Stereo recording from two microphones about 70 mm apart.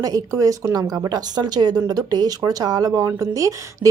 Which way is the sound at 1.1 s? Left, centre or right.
Right.